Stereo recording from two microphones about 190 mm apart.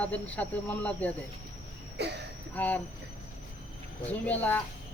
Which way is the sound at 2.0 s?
60° right (ahead or behind).